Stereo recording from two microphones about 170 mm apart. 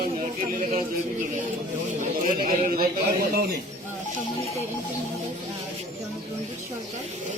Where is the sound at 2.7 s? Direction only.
65° right (ahead or behind).